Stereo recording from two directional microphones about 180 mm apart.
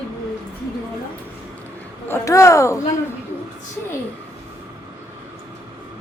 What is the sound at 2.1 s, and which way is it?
Speech, 15° left (ahead or behind).